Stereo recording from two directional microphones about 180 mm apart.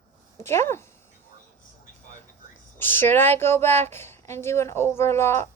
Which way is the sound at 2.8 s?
10° left (ahead or behind).